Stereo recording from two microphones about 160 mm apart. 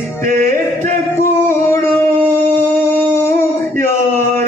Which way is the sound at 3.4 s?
15° left (ahead or behind).